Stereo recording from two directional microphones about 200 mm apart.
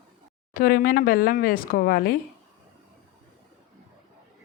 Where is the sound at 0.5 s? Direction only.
45° left (ahead or behind).